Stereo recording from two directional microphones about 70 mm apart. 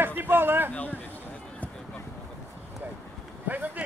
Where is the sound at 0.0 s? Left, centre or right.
Right.